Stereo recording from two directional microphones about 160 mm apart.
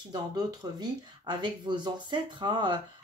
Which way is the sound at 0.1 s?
25° right (ahead or behind).